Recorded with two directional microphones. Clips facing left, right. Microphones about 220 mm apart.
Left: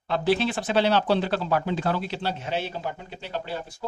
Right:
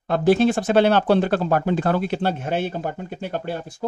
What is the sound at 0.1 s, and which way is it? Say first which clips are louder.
Speech: right 7 dB; 50° right (ahead or behind).